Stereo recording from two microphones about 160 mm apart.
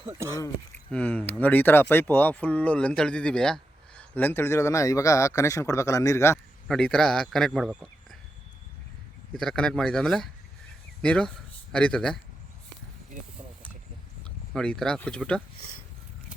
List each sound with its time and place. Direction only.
0.3 s speech: 20° left (ahead or behind)
0.9 s speech: 10° left (ahead or behind)
6.7 s a man's voice: 5° left (ahead or behind)
9.3 s a man's voice: 5° left (ahead or behind)
14.3 s speech: 5° left (ahead or behind)